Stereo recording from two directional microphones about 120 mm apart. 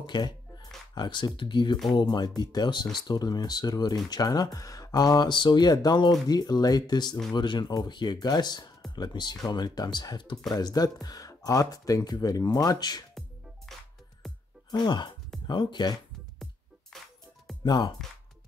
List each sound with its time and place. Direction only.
0.0 s speech: 40° left (ahead or behind)
13.7 s music: 5° left (ahead or behind)
14.7 s speech: 35° left (ahead or behind)
16.9 s music: 5° left (ahead or behind)
17.6 s speech: 40° left (ahead or behind)